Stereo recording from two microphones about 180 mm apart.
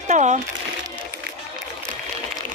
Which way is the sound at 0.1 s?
40° right (ahead or behind).